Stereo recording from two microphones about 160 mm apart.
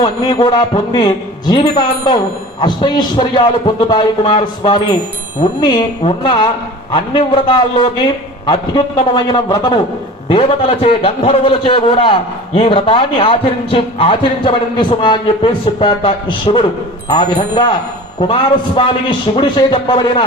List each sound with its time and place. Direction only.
0.0 s a man's voice: 25° left (ahead or behind)
10.2 s a man's voice: 35° left (ahead or behind)
18.8 s a man's voice: 30° left (ahead or behind)